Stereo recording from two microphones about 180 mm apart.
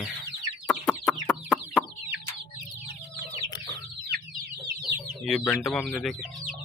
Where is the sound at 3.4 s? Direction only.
20° left (ahead or behind).